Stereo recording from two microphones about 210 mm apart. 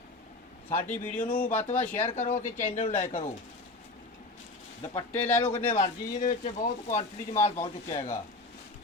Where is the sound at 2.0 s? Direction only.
35° left (ahead or behind).